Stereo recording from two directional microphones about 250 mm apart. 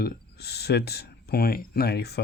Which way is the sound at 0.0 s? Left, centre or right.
Left.